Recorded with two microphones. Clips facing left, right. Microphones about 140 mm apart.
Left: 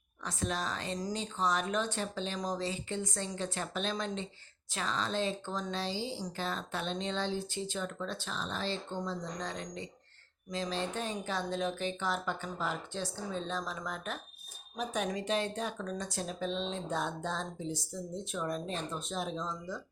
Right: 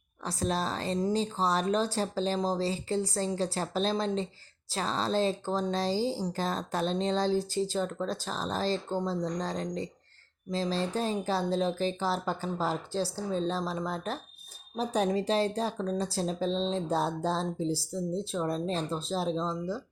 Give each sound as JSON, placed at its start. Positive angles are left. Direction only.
{"t": 0.2, "sound": "speech", "side_deg": -35}